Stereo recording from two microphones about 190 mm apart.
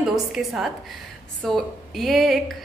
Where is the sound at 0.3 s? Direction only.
Centre (ahead or behind).